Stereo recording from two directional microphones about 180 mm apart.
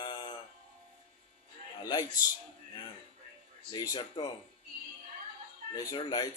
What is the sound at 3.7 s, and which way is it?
Speech, 20° left (ahead or behind).